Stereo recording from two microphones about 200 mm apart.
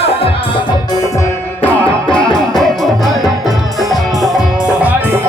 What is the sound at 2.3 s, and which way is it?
Music, centre (ahead or behind).